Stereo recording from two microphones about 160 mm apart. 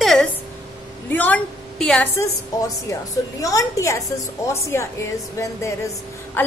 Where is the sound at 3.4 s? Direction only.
20° left (ahead or behind).